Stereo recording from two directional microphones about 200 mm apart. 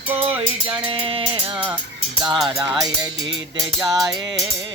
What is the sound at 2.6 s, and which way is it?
Speech, centre (ahead or behind).